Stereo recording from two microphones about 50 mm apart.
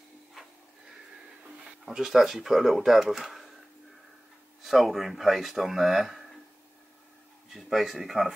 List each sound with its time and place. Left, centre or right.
1.6 s speech: centre
4.6 s speech: centre
7.5 s speech: centre